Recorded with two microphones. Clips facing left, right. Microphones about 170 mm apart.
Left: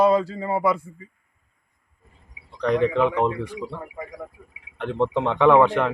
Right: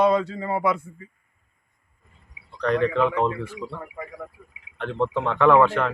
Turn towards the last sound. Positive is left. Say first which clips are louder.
# left 1 dB
turn(degrees=15)  # may be behind; listen again after turning